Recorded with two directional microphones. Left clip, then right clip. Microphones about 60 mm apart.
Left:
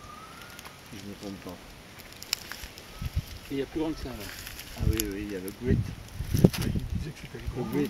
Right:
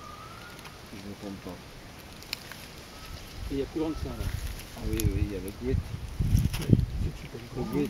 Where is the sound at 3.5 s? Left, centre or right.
Left.